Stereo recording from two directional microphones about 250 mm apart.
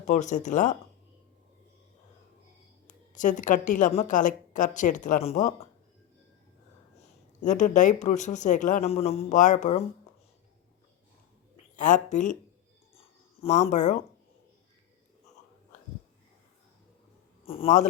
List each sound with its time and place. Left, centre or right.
0.0 s speech: left
2.8 s a woman's voice: left
7.4 s speech: left
11.8 s speech: left
13.0 s a sound: left
17.4 s a man's voice: left